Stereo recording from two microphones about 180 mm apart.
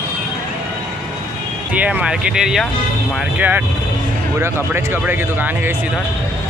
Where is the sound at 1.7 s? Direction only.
10° right (ahead or behind).